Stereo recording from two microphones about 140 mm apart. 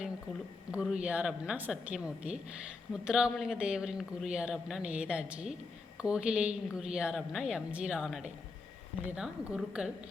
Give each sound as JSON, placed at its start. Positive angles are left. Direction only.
{"t": 0.7, "sound": "a woman's voice", "side_deg": -5}